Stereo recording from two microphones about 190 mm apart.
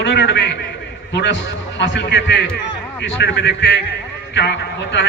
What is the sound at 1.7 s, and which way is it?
A man's voice, 70° left (ahead or behind).